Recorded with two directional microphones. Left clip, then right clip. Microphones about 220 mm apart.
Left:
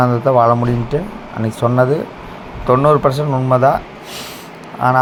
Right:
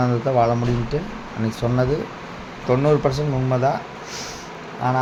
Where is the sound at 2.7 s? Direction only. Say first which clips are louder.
Left 7 dB; 15° left (ahead or behind).